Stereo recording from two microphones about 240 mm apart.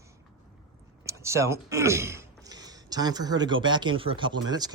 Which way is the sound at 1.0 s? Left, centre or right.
Centre.